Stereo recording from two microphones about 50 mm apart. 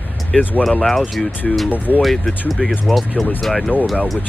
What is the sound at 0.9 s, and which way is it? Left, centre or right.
Speech, centre.